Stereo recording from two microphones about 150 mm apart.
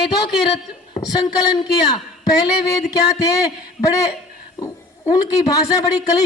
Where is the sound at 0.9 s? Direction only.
25° left (ahead or behind).